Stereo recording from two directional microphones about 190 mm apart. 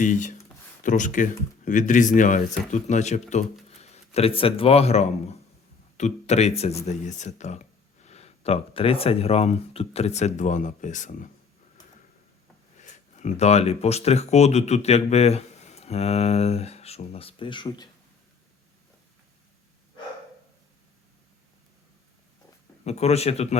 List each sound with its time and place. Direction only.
0.0 s speech: 40° left (ahead or behind)
12.8 s speech: 40° left (ahead or behind); by 17.8 s 20° left (ahead or behind)
22.8 s speech: 35° left (ahead or behind)